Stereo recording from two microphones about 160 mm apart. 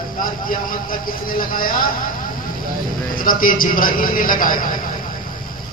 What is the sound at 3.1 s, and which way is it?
A man's voice, 60° left (ahead or behind).